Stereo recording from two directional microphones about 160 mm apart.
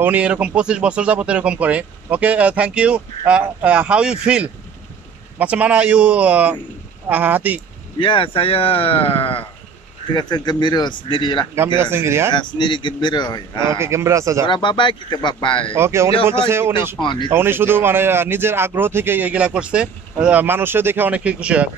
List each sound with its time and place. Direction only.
0.0 s speech: 10° right (ahead or behind)
8.0 s speech: 35° left (ahead or behind)
11.5 s speech: 15° right (ahead or behind)
12.4 s speech: 30° left (ahead or behind)
13.7 s speech: 15° right (ahead or behind)
14.4 s speech: 30° left (ahead or behind)
15.7 s speech: 15° right (ahead or behind)
17.0 s speech: 30° left (ahead or behind)
17.3 s speech: 15° right (ahead or behind)